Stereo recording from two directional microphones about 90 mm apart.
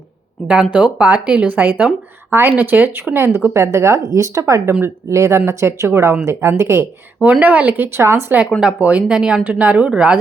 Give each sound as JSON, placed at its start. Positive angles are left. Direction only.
{"t": 0.4, "sound": "speech", "side_deg": -10}
{"t": 7.2, "sound": "speech", "side_deg": -15}
{"t": 7.9, "sound": "speech", "side_deg": -30}
{"t": 8.6, "sound": "speech", "side_deg": -15}